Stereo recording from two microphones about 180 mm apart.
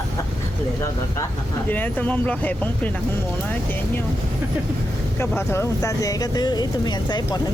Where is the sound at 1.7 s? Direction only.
10° left (ahead or behind).